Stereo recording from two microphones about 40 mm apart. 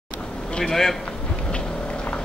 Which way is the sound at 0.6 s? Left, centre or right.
Centre.